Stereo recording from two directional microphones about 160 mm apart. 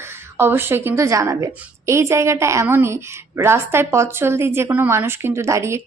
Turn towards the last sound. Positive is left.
turn(degrees=-15)  # may be behind; listen again after turning